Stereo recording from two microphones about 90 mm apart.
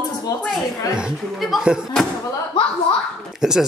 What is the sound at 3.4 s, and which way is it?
Speech, 5° right (ahead or behind).